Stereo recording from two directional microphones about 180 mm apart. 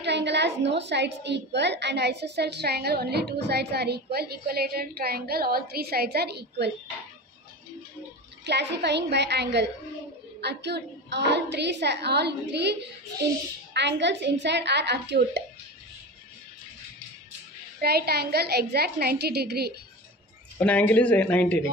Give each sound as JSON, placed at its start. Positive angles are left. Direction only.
{"t": 0.0, "sound": "a woman's voice", "side_deg": -70}
{"t": 8.5, "sound": "a woman's voice", "side_deg": -70}
{"t": 13.7, "sound": "a woman's voice", "side_deg": -75}
{"t": 17.7, "sound": "a woman's voice", "side_deg": -60}
{"t": 20.5, "sound": "speech", "side_deg": 5}